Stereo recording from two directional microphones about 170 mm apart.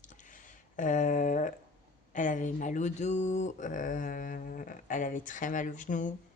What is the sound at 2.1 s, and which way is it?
Speech, 50° left (ahead or behind).